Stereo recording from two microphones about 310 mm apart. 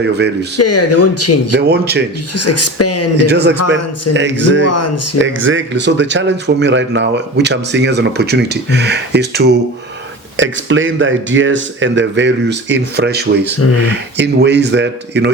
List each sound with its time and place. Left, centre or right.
0.5 s speech: left
1.5 s speech: right
2.3 s speech: left
3.2 s speech: right
4.6 s speech: left
5.2 s speech: right